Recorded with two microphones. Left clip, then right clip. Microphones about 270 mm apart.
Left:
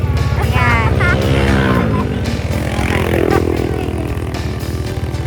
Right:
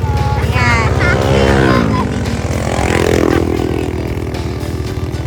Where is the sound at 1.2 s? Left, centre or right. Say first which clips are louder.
Right 4 dB; right.